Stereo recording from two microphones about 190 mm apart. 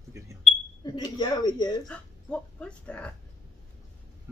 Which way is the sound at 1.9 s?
5° left (ahead or behind).